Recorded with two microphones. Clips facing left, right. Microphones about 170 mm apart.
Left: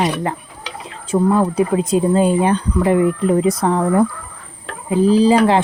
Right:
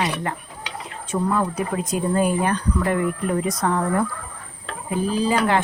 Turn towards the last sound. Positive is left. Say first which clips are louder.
# left 8 dB
turn(degrees=30)  # may be behind; listen again after turning